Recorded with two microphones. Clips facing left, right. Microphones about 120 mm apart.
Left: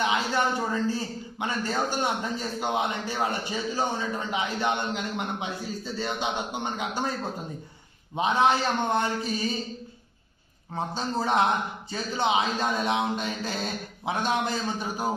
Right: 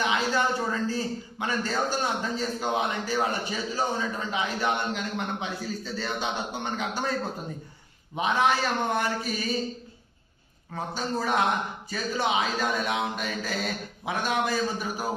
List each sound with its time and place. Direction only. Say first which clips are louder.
0.0 s a man's voice: even; 20° left (ahead or behind)
8.1 s a man's voice: left 2 dB; 25° left (ahead or behind)
10.8 s a man's voice: left 1 dB; 25° left (ahead or behind)